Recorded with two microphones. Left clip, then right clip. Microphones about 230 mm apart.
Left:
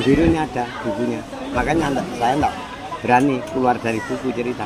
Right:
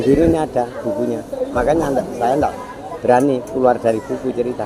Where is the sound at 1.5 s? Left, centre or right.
Left.